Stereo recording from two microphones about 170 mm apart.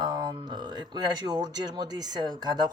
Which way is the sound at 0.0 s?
25° right (ahead or behind).